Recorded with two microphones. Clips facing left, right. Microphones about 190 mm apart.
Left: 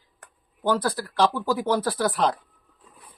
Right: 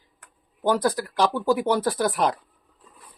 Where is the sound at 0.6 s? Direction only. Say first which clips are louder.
Right 2 dB; 15° right (ahead or behind).